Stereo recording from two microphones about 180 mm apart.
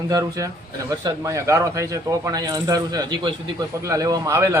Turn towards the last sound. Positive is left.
turn(degrees=-15)  # may be behind; listen again after turning